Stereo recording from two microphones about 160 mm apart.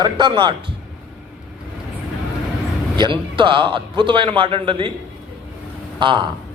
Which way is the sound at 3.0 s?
30° right (ahead or behind).